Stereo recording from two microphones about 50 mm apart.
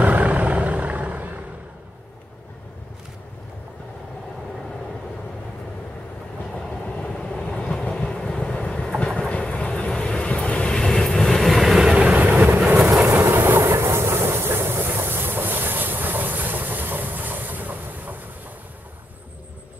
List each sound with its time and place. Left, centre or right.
0.0 s vehicle: right
7.0 s vehicle: centre
8.6 s train: centre
9.3 s vehicle: left
10.8 s vehicle: centre
11.8 s vehicle: centre
12.4 s vehicle: right
13.1 s train: right